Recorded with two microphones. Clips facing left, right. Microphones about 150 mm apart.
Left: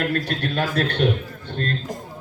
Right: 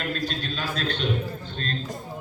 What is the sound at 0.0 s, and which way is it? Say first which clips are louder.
A man's voice: left 6 dB; 65° left (ahead or behind).